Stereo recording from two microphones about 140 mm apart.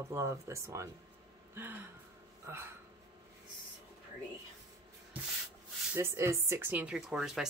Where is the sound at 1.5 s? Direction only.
15° right (ahead or behind).